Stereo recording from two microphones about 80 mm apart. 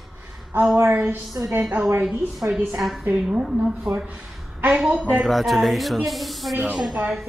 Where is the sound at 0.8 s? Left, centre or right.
Right.